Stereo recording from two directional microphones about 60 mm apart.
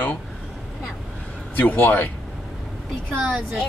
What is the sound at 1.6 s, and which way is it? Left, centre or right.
Speech, left.